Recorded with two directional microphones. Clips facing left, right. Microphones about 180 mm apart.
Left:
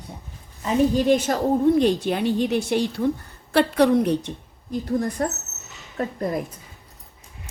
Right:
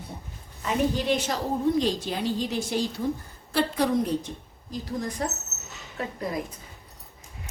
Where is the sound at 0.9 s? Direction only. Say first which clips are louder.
Left 7 dB; 50° left (ahead or behind).